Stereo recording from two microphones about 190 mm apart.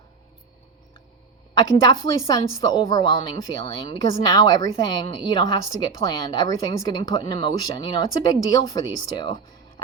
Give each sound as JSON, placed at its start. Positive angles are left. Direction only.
{"t": 1.9, "sound": "a woman's voice", "side_deg": 20}